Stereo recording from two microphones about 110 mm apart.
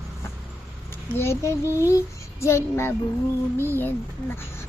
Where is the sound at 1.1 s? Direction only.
25° left (ahead or behind).